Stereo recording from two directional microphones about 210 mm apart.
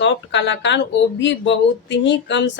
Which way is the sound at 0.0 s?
55° left (ahead or behind).